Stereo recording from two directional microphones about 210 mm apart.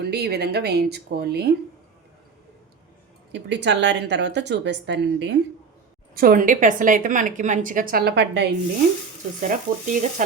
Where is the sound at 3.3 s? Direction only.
55° right (ahead or behind).